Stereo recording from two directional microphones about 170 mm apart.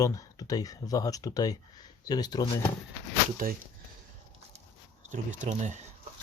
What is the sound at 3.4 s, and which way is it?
Speech, 55° right (ahead or behind).